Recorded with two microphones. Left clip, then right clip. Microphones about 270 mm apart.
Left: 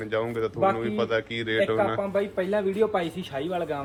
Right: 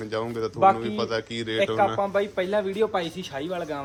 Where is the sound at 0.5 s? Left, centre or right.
Right.